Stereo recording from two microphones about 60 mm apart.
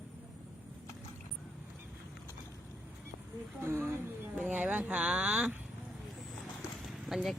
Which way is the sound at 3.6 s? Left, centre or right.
Right.